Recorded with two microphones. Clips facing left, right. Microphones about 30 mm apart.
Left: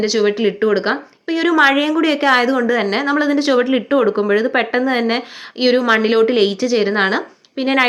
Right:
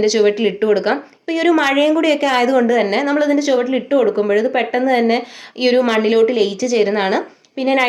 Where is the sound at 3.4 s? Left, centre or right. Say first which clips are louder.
Left 1 dB; left.